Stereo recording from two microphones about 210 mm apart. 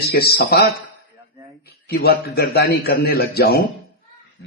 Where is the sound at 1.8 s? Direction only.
50° left (ahead or behind).